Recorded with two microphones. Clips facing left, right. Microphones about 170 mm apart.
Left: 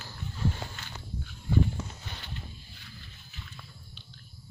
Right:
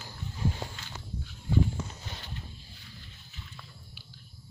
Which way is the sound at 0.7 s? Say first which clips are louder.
Even; 55° left (ahead or behind).